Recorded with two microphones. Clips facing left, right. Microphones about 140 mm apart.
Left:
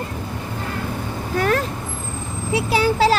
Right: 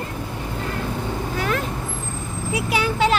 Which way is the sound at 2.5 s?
30° left (ahead or behind).